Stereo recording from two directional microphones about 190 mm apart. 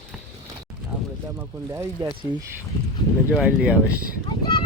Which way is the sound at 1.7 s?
15° right (ahead or behind).